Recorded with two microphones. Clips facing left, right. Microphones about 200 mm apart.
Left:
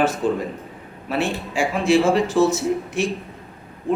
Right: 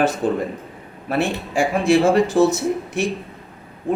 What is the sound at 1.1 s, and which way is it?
Speech, 55° right (ahead or behind).